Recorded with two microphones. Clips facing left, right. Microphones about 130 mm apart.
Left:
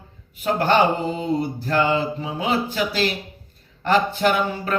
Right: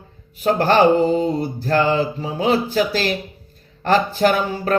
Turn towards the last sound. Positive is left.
turn(degrees=-40)  # may be behind; listen again after turning